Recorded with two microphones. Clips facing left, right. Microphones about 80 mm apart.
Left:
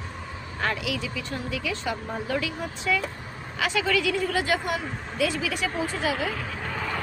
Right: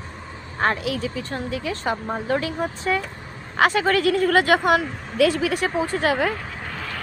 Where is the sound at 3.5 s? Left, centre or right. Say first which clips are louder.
Right 6 dB; right.